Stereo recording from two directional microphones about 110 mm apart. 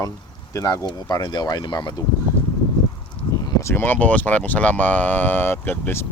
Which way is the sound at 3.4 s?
30° left (ahead or behind).